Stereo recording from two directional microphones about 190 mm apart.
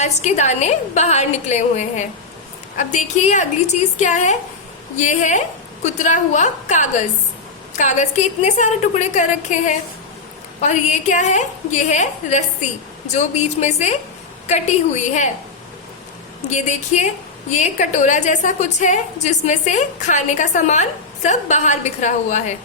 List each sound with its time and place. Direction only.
0.0 s a woman's voice: 35° left (ahead or behind)
16.5 s a woman's voice: 40° left (ahead or behind)